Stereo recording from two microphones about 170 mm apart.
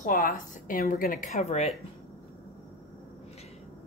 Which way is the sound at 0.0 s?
55° left (ahead or behind).